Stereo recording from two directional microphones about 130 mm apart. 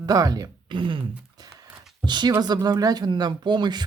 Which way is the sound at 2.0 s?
35° right (ahead or behind).